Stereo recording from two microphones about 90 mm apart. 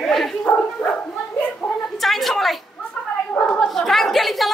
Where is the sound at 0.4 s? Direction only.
15° left (ahead or behind).